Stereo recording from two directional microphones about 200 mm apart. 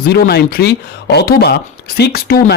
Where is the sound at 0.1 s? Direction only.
55° left (ahead or behind).